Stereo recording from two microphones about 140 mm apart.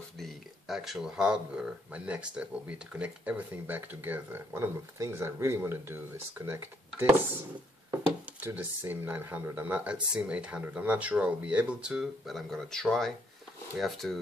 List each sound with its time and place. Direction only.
0.2 s speech: centre (ahead or behind)